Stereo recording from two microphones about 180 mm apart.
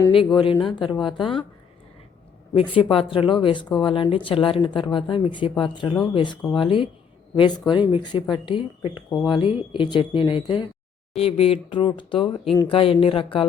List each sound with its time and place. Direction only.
0.1 s speech: 30° left (ahead or behind)
2.6 s speech: 30° left (ahead or behind)